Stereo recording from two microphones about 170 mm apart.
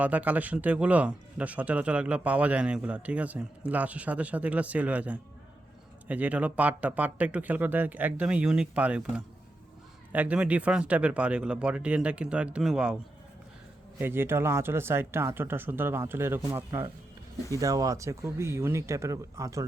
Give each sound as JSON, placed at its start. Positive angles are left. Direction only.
{"t": 0.0, "sound": "a man's voice", "side_deg": -10}
{"t": 14.0, "sound": "a man's voice", "side_deg": -15}